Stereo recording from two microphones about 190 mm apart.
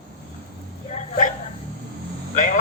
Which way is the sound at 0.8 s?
40° left (ahead or behind).